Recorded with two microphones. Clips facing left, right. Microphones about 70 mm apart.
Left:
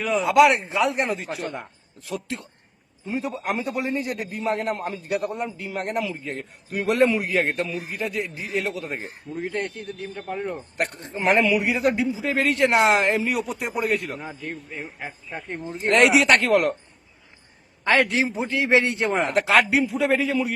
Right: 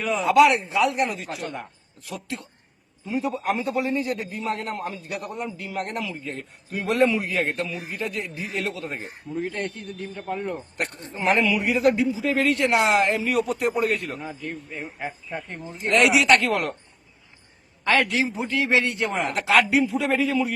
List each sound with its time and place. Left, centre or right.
0.0 s speech: centre
0.3 s a man's voice: left
7.9 s speech: centre
8.6 s a man's voice: left
9.3 s a man's voice: centre
10.8 s a man's voice: left
13.2 s a man's voice: centre
14.0 s a man's voice: centre
14.3 s speech: centre
15.7 s a man's voice: left
18.1 s a man's voice: left